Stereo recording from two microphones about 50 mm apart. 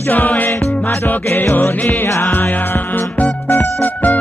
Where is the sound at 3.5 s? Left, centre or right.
Left.